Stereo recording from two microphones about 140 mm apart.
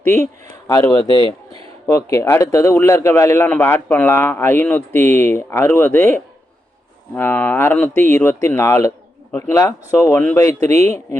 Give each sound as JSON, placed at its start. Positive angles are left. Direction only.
{"t": 0.9, "sound": "speech", "side_deg": 35}
{"t": 1.9, "sound": "a man's voice", "side_deg": 25}